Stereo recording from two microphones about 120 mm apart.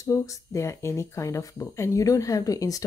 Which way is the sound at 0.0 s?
25° left (ahead or behind).